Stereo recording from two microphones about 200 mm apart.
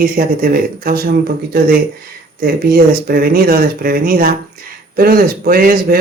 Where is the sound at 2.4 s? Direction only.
50° right (ahead or behind).